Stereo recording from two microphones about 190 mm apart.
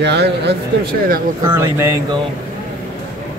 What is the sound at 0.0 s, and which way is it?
Speech, 60° right (ahead or behind).